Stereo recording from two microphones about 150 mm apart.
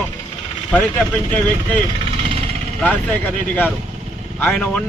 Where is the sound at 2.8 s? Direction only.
10° left (ahead or behind).